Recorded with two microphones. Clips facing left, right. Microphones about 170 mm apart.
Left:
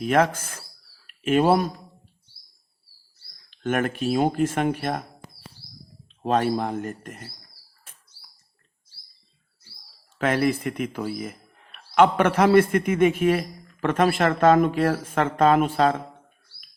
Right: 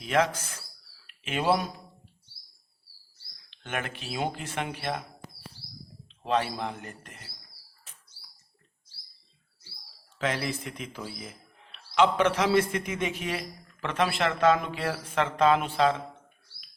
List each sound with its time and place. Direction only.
0.0 s speech: 50° left (ahead or behind)
3.5 s speech: 45° left (ahead or behind)
6.2 s speech: 45° left (ahead or behind)
7.9 s bird: 50° left (ahead or behind)
10.2 s a man's voice: 55° left (ahead or behind)